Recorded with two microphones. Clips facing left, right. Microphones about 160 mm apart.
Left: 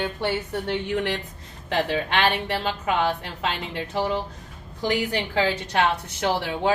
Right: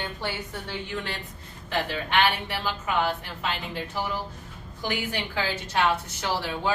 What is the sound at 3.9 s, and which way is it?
Speech, 30° left (ahead or behind).